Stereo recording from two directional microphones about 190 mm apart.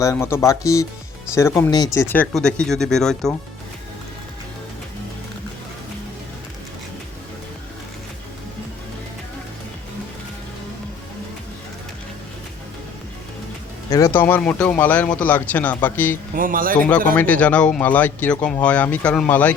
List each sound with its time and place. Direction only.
0.0 s speech: 15° left (ahead or behind)
13.9 s speech: 15° left (ahead or behind)
16.3 s speech: 45° right (ahead or behind)
17.2 s speech: 10° left (ahead or behind)